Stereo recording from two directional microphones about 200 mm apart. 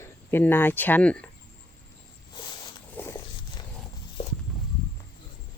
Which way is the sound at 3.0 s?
10° left (ahead or behind).